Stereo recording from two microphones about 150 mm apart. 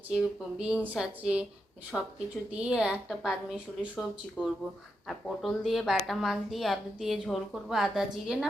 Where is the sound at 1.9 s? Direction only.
5° left (ahead or behind).